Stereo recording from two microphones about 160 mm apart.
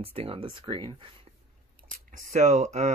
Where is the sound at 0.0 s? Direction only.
35° right (ahead or behind).